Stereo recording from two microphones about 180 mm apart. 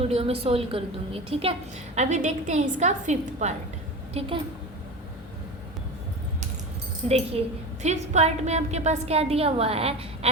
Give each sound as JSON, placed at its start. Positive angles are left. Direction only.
{"t": 0.0, "sound": "a woman's voice", "side_deg": -35}
{"t": 7.1, "sound": "a woman's voice", "side_deg": -35}